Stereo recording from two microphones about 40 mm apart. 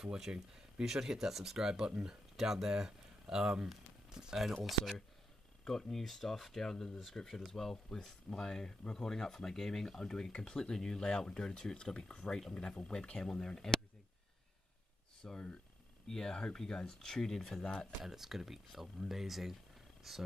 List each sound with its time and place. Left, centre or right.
0.0 s speech: centre
5.7 s speech: centre
15.2 s speech: left
18.0 s speech: centre